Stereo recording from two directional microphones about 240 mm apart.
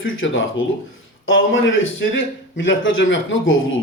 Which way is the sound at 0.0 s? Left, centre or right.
Left.